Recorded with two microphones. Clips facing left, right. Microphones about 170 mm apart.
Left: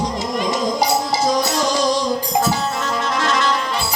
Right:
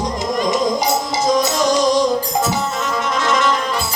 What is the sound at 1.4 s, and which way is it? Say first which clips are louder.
Music: right 3 dB; 20° right (ahead or behind).